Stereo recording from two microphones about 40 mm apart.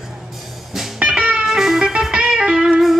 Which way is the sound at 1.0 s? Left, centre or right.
Right.